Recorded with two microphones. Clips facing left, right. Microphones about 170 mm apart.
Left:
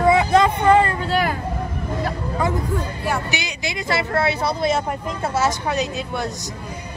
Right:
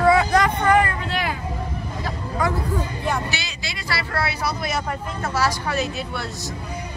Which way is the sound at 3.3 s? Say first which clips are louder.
Left 5 dB; 15° left (ahead or behind).